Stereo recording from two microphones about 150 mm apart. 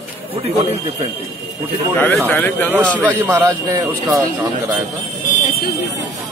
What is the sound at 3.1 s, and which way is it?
Speech, 20° right (ahead or behind).